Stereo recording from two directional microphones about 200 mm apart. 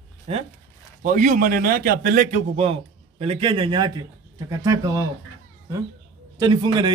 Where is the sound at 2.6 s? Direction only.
30° right (ahead or behind).